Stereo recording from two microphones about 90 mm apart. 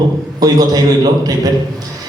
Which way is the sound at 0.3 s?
45° right (ahead or behind).